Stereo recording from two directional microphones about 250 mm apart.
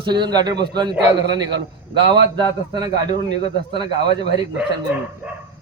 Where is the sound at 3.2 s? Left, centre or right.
Left.